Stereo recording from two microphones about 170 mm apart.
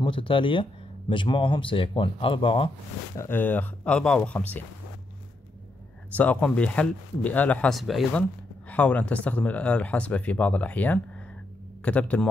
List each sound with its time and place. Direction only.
0.0 s speech: 30° left (ahead or behind)
3.2 s speech: 10° left (ahead or behind)
6.1 s speech: 10° left (ahead or behind)